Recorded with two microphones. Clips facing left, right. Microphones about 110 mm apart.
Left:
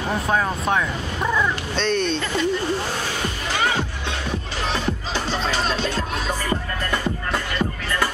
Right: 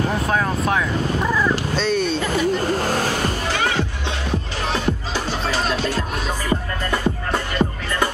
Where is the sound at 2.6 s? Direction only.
45° right (ahead or behind).